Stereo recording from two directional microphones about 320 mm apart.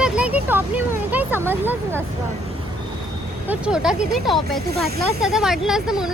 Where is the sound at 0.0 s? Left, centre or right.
Centre.